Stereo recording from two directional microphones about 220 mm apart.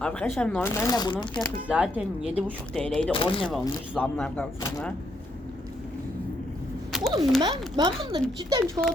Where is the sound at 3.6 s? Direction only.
10° left (ahead or behind).